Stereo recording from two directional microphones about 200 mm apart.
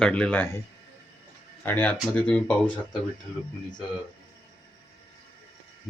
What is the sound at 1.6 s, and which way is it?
Speech, 10° left (ahead or behind).